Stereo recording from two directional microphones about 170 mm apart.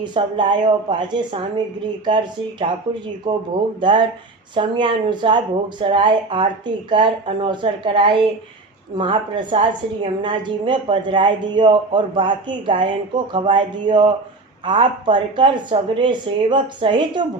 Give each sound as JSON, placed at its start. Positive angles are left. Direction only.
{"t": 0.0, "sound": "a woman's voice", "side_deg": -25}
{"t": 3.3, "sound": "a woman's voice", "side_deg": -25}